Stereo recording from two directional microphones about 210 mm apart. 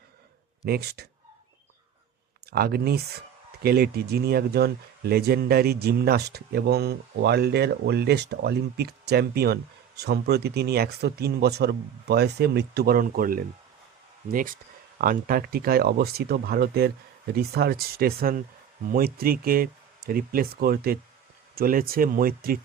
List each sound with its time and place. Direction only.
0.6 s speech: 50° right (ahead or behind)
2.5 s speech: 45° right (ahead or behind)